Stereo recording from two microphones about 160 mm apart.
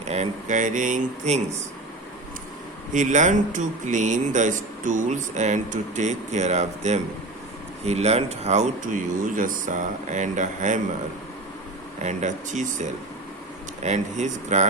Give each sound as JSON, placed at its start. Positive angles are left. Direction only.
{"t": 0.0, "sound": "speech", "side_deg": -45}
{"t": 2.9, "sound": "speech", "side_deg": -50}
{"t": 12.0, "sound": "speech", "side_deg": -50}